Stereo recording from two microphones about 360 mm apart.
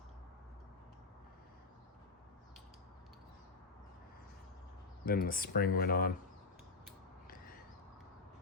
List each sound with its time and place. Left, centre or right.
5.0 s speech: left